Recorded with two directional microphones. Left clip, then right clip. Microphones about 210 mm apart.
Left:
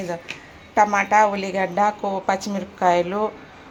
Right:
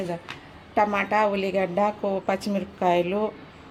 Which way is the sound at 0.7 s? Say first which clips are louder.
Left 5 dB; 15° right (ahead or behind).